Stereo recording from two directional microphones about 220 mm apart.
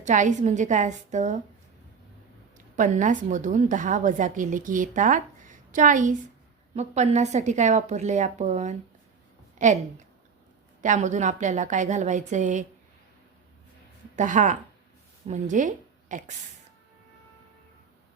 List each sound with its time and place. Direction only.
0.0 s a woman's voice: 35° right (ahead or behind)
2.6 s a woman's voice: 35° right (ahead or behind)
10.8 s a woman's voice: 35° right (ahead or behind)
14.2 s a woman's voice: 35° right (ahead or behind)